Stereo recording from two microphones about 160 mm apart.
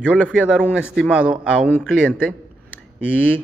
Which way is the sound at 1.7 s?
10° left (ahead or behind).